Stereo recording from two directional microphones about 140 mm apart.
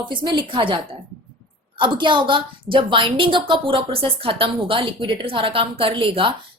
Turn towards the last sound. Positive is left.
turn(degrees=-40)  # may be behind; listen again after turning